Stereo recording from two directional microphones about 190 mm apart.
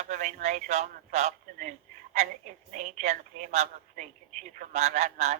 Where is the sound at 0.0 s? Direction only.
40° right (ahead or behind).